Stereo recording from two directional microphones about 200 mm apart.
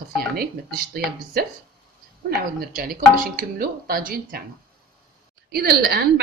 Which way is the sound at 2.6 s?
45° right (ahead or behind).